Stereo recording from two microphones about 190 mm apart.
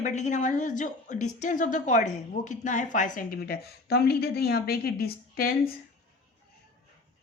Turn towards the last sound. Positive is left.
turn(degrees=55)  # may be behind; listen again after turning